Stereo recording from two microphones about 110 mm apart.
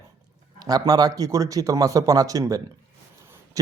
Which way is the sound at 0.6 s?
35° right (ahead or behind).